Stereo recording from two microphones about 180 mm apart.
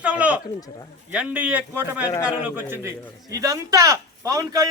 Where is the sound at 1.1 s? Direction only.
5° right (ahead or behind).